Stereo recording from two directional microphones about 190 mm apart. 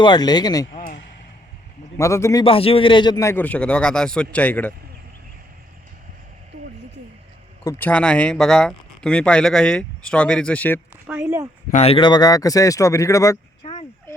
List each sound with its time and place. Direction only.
0.0 s speech: 20° left (ahead or behind)
2.0 s a man's voice: 15° left (ahead or behind)
2.4 s a man's voice: 30° left (ahead or behind); by 4.7 s 10° left (ahead or behind)
7.6 s speech: 15° left (ahead or behind)
11.0 s speech: 15° right (ahead or behind)
11.7 s a man's voice: 35° left (ahead or behind); by 13.4 s 15° left (ahead or behind)
13.6 s a sound: 30° left (ahead or behind)